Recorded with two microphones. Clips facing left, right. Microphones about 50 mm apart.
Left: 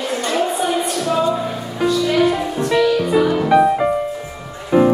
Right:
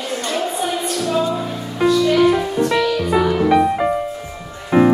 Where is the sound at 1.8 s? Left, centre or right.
Centre.